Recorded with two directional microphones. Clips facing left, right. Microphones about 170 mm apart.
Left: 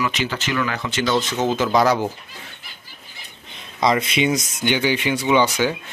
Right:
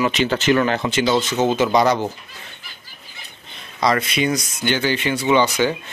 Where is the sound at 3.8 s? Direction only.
20° left (ahead or behind).